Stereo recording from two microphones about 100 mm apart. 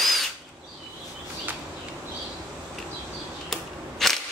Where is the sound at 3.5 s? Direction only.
Centre (ahead or behind).